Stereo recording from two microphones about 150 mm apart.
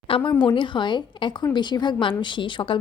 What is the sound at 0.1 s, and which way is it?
A woman's voice, 35° left (ahead or behind).